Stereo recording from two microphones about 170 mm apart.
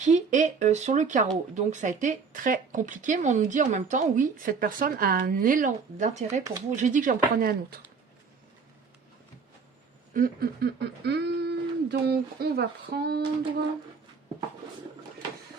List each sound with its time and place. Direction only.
0.0 s speech: 45° right (ahead or behind)
10.2 s speech: 60° right (ahead or behind)